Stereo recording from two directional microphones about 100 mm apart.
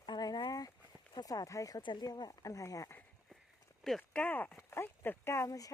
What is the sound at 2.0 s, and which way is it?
Speech, 40° left (ahead or behind).